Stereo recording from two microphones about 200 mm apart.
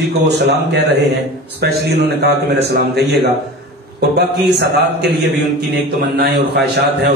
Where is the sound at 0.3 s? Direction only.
60° right (ahead or behind).